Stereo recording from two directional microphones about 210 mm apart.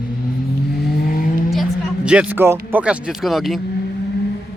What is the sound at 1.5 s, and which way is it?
Music, 5° right (ahead or behind).